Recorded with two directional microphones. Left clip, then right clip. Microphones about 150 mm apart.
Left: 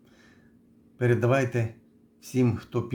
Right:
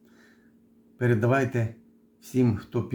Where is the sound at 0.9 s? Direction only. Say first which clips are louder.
Even; 10° left (ahead or behind).